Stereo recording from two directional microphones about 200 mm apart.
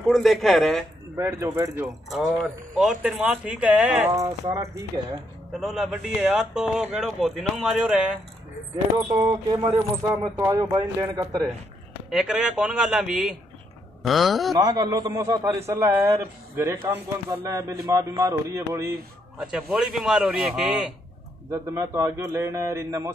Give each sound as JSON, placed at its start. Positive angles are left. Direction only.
{"t": 0.1, "sound": "speech", "side_deg": 0}
{"t": 1.1, "sound": "a man's voice", "side_deg": -15}
{"t": 2.0, "sound": "speech", "side_deg": 0}
{"t": 5.6, "sound": "speech", "side_deg": 0}
{"t": 8.9, "sound": "a man's voice", "side_deg": -20}
{"t": 12.1, "sound": "speech", "side_deg": -5}
{"t": 14.5, "sound": "a man's voice", "side_deg": -20}
{"t": 19.3, "sound": "speech", "side_deg": -5}
{"t": 21.5, "sound": "a man's voice", "side_deg": -15}